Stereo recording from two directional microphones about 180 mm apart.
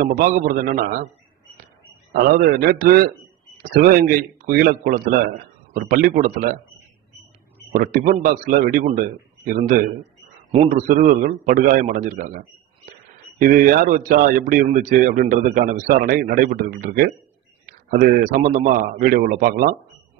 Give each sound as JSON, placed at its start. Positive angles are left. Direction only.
{"t": 0.0, "sound": "a man's voice", "side_deg": -50}
{"t": 2.1, "sound": "a man's voice", "side_deg": -55}
{"t": 7.7, "sound": "a man's voice", "side_deg": -50}
{"t": 10.7, "sound": "a man's voice", "side_deg": -45}